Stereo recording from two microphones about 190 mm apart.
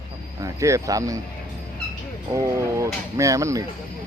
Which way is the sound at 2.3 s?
15° right (ahead or behind).